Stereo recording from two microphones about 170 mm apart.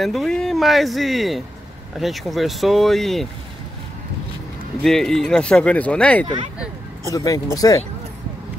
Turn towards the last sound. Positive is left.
turn(degrees=20)  # may be behind; listen again after turning